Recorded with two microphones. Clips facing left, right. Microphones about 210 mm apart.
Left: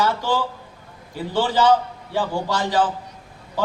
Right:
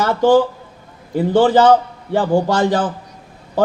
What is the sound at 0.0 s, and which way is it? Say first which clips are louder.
A man's voice: right 9 dB; 50° right (ahead or behind).